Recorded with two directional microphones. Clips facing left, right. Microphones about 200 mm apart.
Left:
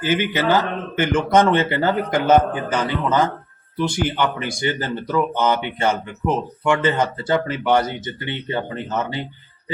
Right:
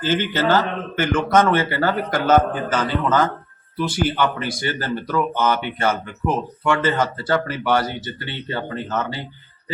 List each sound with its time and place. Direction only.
0.0 s speech: 15° left (ahead or behind)